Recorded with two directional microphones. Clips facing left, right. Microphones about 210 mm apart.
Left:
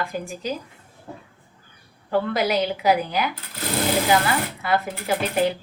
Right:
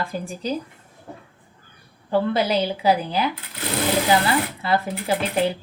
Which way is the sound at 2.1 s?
30° right (ahead or behind).